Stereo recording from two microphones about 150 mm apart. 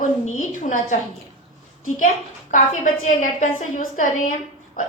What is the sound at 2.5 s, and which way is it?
A woman's voice, 55° left (ahead or behind).